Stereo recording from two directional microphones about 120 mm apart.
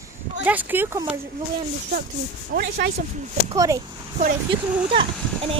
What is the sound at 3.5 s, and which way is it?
Speech, 25° right (ahead or behind).